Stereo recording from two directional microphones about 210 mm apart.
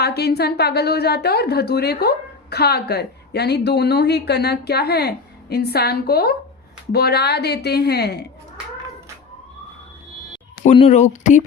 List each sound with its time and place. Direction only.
0.0 s a woman's voice: 50° left (ahead or behind)
10.8 s speech: 35° left (ahead or behind)